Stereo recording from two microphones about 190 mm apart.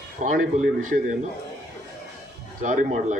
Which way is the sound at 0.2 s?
40° right (ahead or behind).